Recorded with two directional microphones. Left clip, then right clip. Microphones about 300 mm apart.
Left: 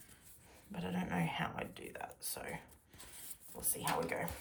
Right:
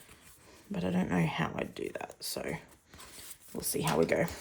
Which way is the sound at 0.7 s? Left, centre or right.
Centre.